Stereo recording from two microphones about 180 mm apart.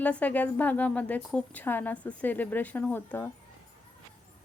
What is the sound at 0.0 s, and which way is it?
A woman's voice, 10° left (ahead or behind).